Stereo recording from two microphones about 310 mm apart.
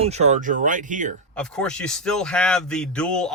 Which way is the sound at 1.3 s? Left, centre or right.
Centre.